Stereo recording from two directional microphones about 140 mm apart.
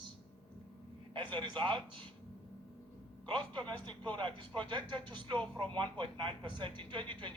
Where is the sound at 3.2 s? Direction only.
35° right (ahead or behind).